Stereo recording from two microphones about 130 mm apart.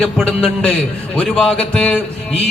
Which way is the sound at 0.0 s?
5° left (ahead or behind).